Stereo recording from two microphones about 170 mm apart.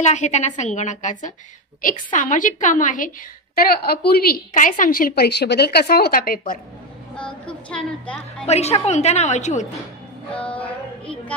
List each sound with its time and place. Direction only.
0.0 s a woman's voice: 45° left (ahead or behind)
3.7 s a woman's voice: 65° left (ahead or behind)
7.7 s a woman's voice: 5° left (ahead or behind)
8.5 s a woman's voice: 40° left (ahead or behind)
10.3 s female singing: 10° left (ahead or behind)